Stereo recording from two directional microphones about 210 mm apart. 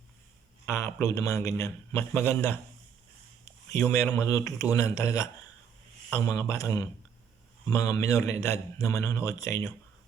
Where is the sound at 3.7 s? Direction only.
10° left (ahead or behind).